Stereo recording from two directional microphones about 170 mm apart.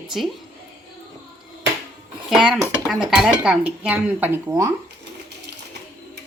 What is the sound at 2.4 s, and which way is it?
Speech, centre (ahead or behind).